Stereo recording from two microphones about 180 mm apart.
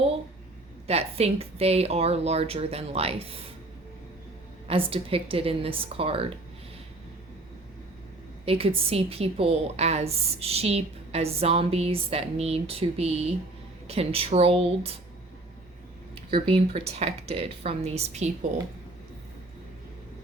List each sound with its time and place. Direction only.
0.9 s a woman's voice: 35° right (ahead or behind)
4.7 s a woman's voice: 30° right (ahead or behind)
8.4 s a woman's voice: 30° right (ahead or behind)
16.3 s a woman's voice: 30° right (ahead or behind)